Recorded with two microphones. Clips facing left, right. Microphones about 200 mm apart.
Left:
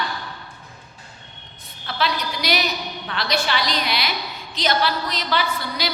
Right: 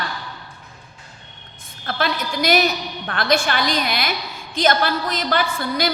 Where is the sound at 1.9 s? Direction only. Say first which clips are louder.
Right 2 dB; 50° right (ahead or behind).